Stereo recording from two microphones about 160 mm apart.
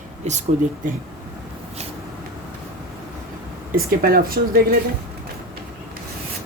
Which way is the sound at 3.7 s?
65° right (ahead or behind).